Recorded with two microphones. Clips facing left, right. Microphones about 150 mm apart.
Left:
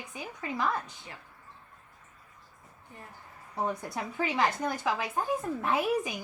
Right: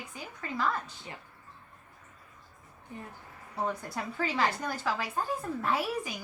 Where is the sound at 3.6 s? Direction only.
15° left (ahead or behind).